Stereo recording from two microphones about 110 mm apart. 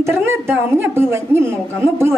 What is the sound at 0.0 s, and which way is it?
A woman's voice, 20° right (ahead or behind).